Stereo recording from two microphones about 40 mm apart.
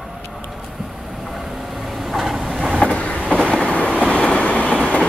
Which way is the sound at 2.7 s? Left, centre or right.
Left.